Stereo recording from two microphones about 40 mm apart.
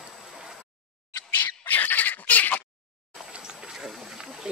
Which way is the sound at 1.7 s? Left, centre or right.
Left.